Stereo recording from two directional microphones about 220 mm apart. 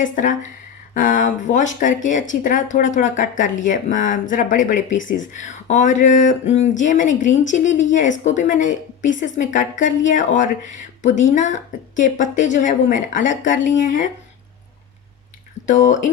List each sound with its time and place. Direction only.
0.0 s speech: 35° left (ahead or behind)
1.5 s speech: 60° left (ahead or behind)
1.8 s speech: 35° left (ahead or behind)
15.6 s speech: 35° left (ahead or behind)